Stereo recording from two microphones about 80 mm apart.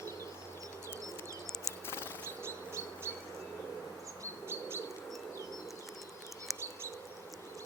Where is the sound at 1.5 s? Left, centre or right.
Centre.